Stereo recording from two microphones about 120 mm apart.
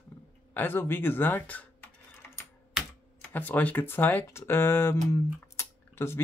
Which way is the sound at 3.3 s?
15° left (ahead or behind).